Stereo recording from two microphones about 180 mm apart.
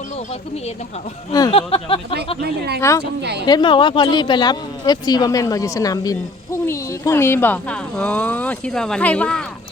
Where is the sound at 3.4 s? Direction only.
25° left (ahead or behind).